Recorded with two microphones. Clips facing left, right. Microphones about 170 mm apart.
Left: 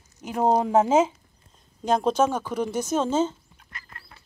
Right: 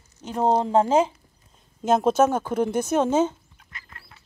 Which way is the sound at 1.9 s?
5° right (ahead or behind).